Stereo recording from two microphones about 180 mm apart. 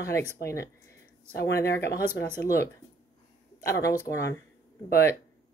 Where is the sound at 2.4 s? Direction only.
15° left (ahead or behind).